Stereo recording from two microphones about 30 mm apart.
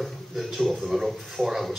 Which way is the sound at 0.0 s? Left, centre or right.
Centre.